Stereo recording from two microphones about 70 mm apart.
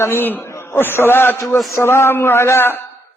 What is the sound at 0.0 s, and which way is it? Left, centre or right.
Speech, left.